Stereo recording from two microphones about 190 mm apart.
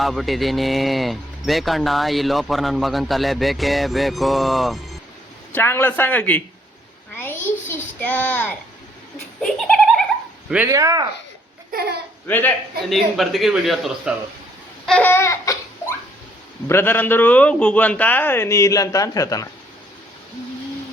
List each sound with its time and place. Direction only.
0.0 s speech: centre (ahead or behind)
5.5 s a man's voice: 10° left (ahead or behind)
7.2 s a sound: 10° left (ahead or behind)
10.7 s speech: 15° right (ahead or behind)
11.7 s speech: 55° right (ahead or behind)
12.3 s a man's voice: 10° left (ahead or behind)
14.8 s laughter: 10° left (ahead or behind)
16.6 s a man's voice: 10° left (ahead or behind)